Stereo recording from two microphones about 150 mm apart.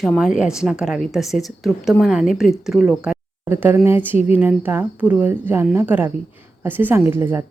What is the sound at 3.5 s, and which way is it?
A woman's voice, 15° right (ahead or behind).